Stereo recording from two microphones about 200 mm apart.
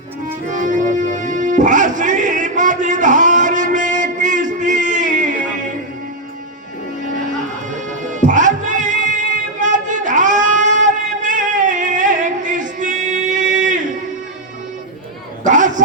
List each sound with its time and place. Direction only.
0.4 s music: 40° right (ahead or behind)
7.7 s music: 40° right (ahead or behind)
15.4 s a sound: 40° right (ahead or behind)